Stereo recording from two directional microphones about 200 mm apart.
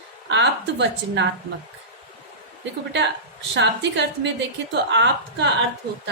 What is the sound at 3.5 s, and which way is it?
A woman's voice, 60° right (ahead or behind).